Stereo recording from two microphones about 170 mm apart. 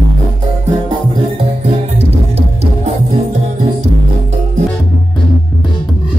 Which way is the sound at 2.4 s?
40° right (ahead or behind).